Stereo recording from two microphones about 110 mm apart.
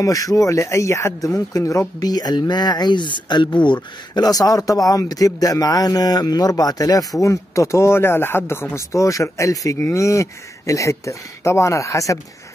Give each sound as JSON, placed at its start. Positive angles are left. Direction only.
{"t": 0.0, "sound": "a man's voice", "side_deg": 30}